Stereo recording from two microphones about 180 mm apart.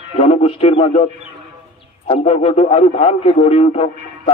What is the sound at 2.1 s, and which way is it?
A man's voice, 35° left (ahead or behind).